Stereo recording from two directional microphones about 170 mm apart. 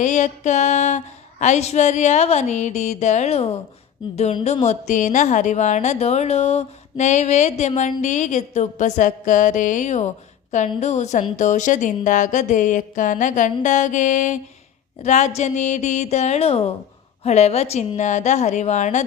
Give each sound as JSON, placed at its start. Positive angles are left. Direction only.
{"t": 0.0, "sound": "a woman's voice", "side_deg": 45}